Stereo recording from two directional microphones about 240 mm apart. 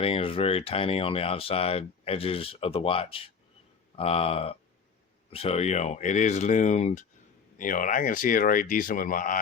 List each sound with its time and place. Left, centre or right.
0.0 s speech: left